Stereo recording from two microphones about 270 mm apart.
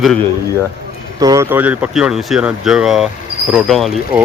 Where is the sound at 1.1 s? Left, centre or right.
Centre.